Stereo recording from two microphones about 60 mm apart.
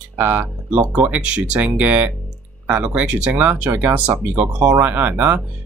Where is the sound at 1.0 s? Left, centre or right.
Centre.